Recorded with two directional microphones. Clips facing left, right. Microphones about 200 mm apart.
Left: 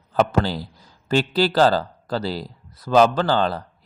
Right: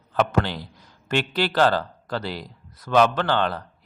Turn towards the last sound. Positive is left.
turn(degrees=35)  # may be behind; listen again after turning